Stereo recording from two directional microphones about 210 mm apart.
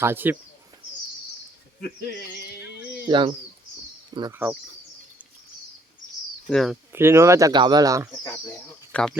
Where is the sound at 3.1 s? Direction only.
20° right (ahead or behind).